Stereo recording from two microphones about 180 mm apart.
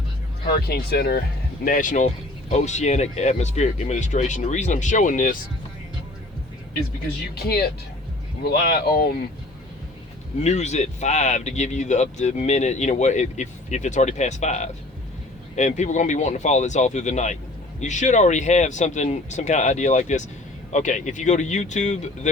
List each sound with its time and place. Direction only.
0.4 s speech: 55° left (ahead or behind)
1.6 s speech: 50° left (ahead or behind)
7.3 s speech: 60° left (ahead or behind)
10.4 s speech: 40° left (ahead or behind)